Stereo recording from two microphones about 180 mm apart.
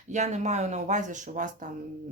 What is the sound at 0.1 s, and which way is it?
Speech, 40° right (ahead or behind).